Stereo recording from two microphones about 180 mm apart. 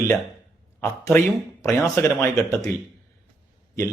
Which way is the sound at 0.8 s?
15° left (ahead or behind).